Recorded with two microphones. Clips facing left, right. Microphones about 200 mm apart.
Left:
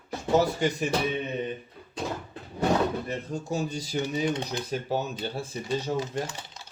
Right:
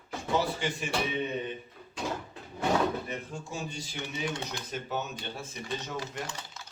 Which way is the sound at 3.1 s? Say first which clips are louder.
Left 7 dB; 40° left (ahead or behind).